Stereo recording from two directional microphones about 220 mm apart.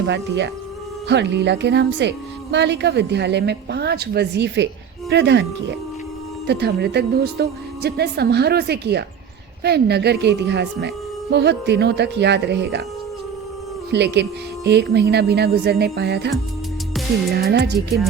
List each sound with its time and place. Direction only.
0.0 s speech: 55° right (ahead or behind)
6.5 s speech: 50° right (ahead or behind)
13.9 s speech: 50° right (ahead or behind)
17.3 s speech: 45° right (ahead or behind)